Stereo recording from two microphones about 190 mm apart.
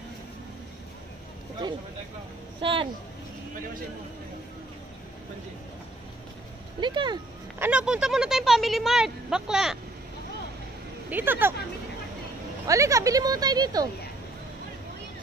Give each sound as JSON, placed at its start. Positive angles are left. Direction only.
{"t": 2.6, "sound": "speech", "side_deg": -25}
{"t": 6.8, "sound": "speech", "side_deg": -25}
{"t": 7.5, "sound": "speech", "side_deg": -10}
{"t": 11.1, "sound": "speech", "side_deg": -10}
{"t": 12.6, "sound": "speech", "side_deg": -15}